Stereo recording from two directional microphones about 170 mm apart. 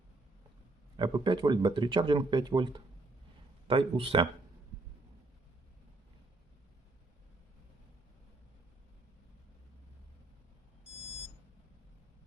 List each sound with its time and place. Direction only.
0.9 s speech: 25° right (ahead or behind)